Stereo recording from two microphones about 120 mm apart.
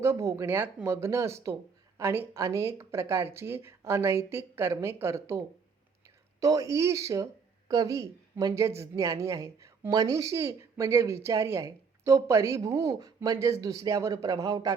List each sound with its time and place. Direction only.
0.0 s speech: 25° right (ahead or behind)
6.4 s speech: 30° right (ahead or behind)